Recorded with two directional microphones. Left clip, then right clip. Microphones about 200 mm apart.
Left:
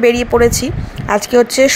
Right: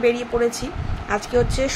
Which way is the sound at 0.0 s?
45° left (ahead or behind).